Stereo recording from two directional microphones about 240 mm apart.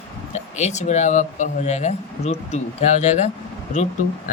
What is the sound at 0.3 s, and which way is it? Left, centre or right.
Speech, left.